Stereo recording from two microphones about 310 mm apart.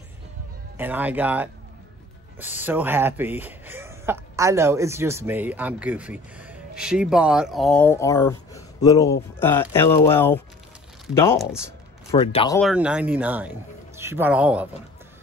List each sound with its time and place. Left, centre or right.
0.7 s speech: centre
2.6 s speech: centre
12.1 s speech: centre
12.5 s speech: centre